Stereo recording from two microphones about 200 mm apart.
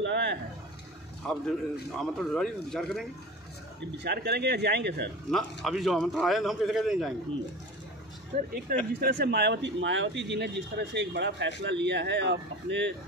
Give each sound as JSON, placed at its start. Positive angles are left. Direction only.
{"t": 0.0, "sound": "a sound", "side_deg": -60}
{"t": 1.2, "sound": "a man's voice", "side_deg": 5}
{"t": 4.0, "sound": "a man's voice", "side_deg": -55}
{"t": 5.3, "sound": "speech", "side_deg": 0}
{"t": 8.7, "sound": "a man's voice", "side_deg": -50}